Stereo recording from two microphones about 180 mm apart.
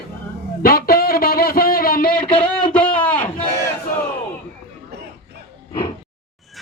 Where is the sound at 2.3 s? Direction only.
30° left (ahead or behind).